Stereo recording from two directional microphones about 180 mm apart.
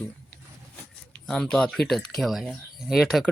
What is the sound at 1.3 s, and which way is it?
Speech, 5° left (ahead or behind).